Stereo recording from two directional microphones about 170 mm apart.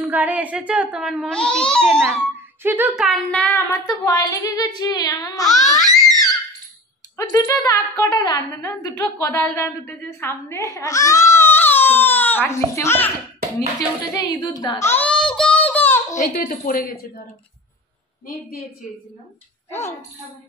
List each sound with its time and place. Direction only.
0.0 s a child's voice: 10° right (ahead or behind)
2.6 s speech: 10° right (ahead or behind)
3.1 s a woman's voice: 5° left (ahead or behind)
3.8 s child singing: 20° left (ahead or behind)
5.4 s a child's voice: centre (ahead or behind)
5.8 s a sound: centre (ahead or behind)
7.2 s a woman's voice: 20° left (ahead or behind)
13.7 s child singing: 25° left (ahead or behind)
14.9 s baby cry: 10° left (ahead or behind)
16.2 s a woman's voice: 50° left (ahead or behind)
19.7 s a woman's voice: 15° left (ahead or behind)